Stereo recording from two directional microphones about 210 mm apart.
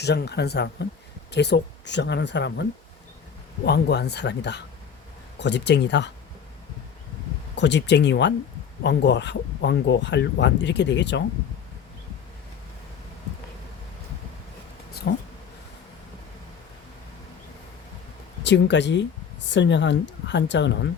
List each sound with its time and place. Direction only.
0.0 s speech: 50° left (ahead or behind)
3.7 s speech: 50° left (ahead or behind)
7.5 s speech: 55° left (ahead or behind)
15.1 s speech: 50° left (ahead or behind)
18.4 s speech: 55° left (ahead or behind)